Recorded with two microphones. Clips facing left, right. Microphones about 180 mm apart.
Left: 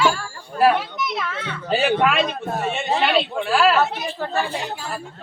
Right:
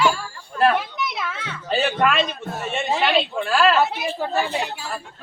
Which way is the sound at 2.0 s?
5° left (ahead or behind).